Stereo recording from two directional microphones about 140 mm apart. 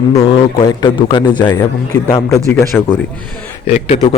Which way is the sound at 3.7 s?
50° left (ahead or behind).